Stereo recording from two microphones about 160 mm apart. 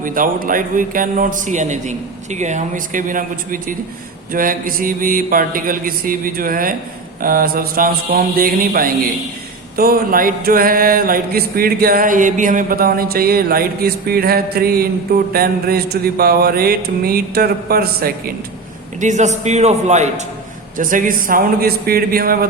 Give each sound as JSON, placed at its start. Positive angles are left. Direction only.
{"t": 0.0, "sound": "a man's voice", "side_deg": -60}
{"t": 9.7, "sound": "a sound", "side_deg": -65}
{"t": 18.9, "sound": "a man's voice", "side_deg": -50}
{"t": 20.7, "sound": "a man's voice", "side_deg": -55}